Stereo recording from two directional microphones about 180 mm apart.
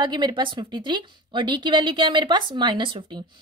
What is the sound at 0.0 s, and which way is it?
Speech, 25° right (ahead or behind).